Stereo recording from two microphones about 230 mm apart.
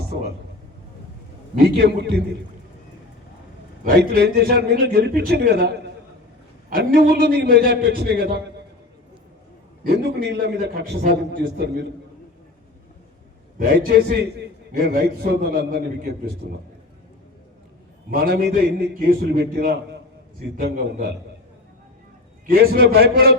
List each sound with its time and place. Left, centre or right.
1.5 s a man's voice: right
3.8 s a man's voice: right
9.8 s a man's voice: right
13.6 s a man's voice: right
18.1 s a man's voice: right
22.4 s a man's voice: right